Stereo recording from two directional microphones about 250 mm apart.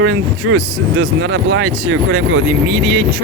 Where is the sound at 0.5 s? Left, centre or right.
Right.